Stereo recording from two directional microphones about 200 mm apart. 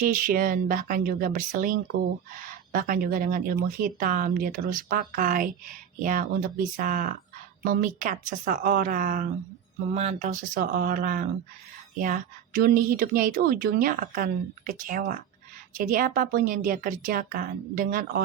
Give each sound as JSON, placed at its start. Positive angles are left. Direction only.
{"t": 0.0, "sound": "a woman's voice", "side_deg": -45}
{"t": 9.9, "sound": "a woman's voice", "side_deg": -35}